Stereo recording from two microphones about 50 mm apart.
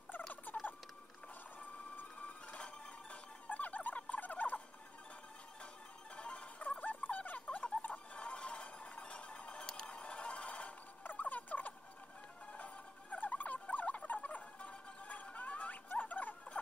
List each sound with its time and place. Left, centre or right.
0.5 s rodents: left
2.4 s a sound: left
6.1 s music: left
6.6 s a sound: left
7.1 s gargling: left
7.8 s zither: left
8.2 s music: left
11.1 s a sound: left
12.5 s rodents: left
14.6 s a sound: left
15.3 s music: left
15.9 s rodents: left